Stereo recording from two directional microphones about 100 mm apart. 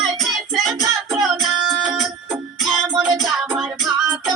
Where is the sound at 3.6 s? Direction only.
5° right (ahead or behind).